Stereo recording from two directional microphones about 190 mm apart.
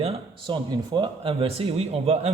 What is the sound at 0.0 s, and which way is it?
A man's voice, 30° right (ahead or behind).